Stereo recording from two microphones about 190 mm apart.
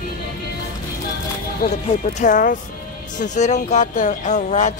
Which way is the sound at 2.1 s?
45° left (ahead or behind).